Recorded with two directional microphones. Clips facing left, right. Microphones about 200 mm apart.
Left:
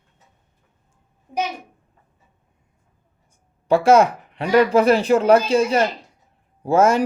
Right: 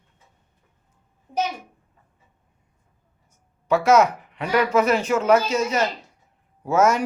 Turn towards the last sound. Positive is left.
turn(degrees=30)  # may be behind; listen again after turning